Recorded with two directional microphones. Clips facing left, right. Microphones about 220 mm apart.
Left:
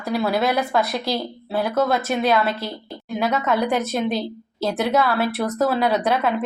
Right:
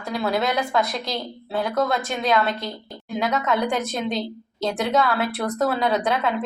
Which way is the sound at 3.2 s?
30° left (ahead or behind).